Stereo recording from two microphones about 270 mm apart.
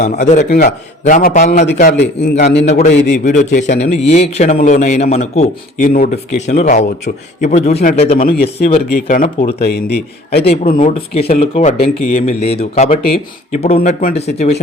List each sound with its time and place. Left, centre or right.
0.3 s a man's voice: left
1.6 s a man's voice: left
3.2 s a man's voice: left